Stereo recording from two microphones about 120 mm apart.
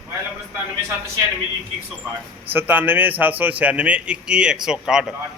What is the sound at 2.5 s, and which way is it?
A man's voice, 15° right (ahead or behind).